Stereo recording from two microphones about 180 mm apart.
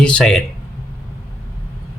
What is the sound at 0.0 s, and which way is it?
Speech, 5° left (ahead or behind).